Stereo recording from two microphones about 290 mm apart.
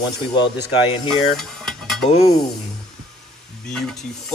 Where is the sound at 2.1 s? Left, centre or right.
Left.